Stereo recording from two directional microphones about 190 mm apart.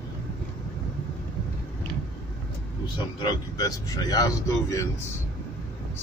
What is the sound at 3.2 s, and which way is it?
A man's voice, 20° left (ahead or behind).